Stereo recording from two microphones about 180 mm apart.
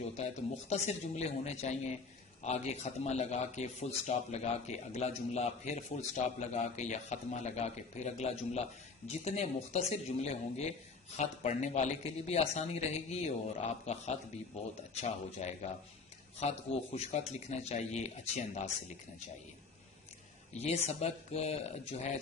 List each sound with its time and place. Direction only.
0.7 s a man's voice: 40° left (ahead or behind)
16.4 s a man's voice: 35° left (ahead or behind)
20.5 s a man's voice: 35° left (ahead or behind)